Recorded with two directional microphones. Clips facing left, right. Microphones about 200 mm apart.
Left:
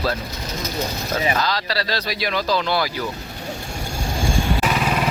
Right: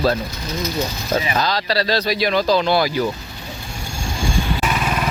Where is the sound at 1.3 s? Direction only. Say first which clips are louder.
Right 3 dB; 20° right (ahead or behind).